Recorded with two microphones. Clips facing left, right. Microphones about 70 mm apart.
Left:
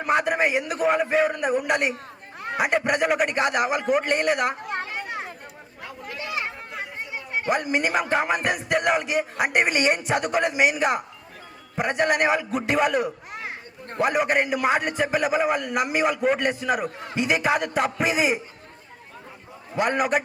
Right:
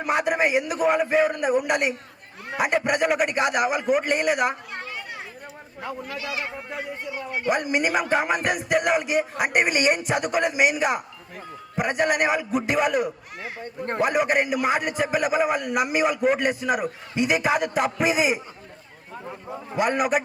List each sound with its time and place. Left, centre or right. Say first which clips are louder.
0.0 s a man's voice: even; centre
4.7 s a sound: left 5 dB; left
7.4 s a man's voice: right 1 dB; centre
19.7 s a man's voice: even; centre